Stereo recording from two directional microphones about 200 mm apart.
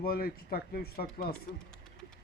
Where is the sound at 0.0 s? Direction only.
50° left (ahead or behind).